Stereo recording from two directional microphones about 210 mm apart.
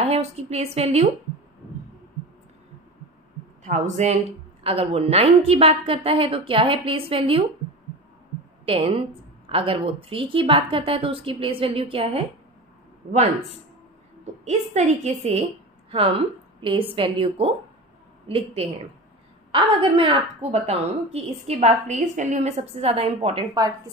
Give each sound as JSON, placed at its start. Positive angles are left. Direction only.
{"t": 0.0, "sound": "a woman's voice", "side_deg": -30}
{"t": 3.6, "sound": "a woman's voice", "side_deg": -35}
{"t": 8.6, "sound": "a woman's voice", "side_deg": -25}
{"t": 14.4, "sound": "a woman's voice", "side_deg": -30}